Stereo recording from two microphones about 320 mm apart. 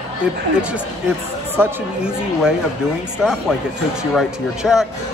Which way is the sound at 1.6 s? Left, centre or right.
Centre.